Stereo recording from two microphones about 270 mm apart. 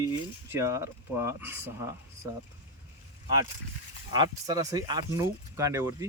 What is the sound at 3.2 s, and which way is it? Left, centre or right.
Speech, centre.